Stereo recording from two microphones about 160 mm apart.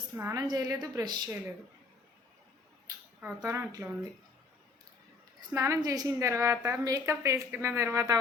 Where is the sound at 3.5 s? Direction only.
20° right (ahead or behind).